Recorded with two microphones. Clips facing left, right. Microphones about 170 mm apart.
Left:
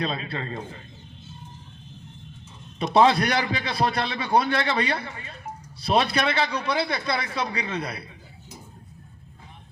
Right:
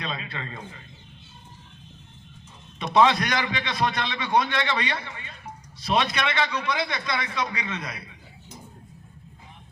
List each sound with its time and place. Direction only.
0.0 s a man's voice: 35° left (ahead or behind)
2.7 s a man's voice: 35° left (ahead or behind)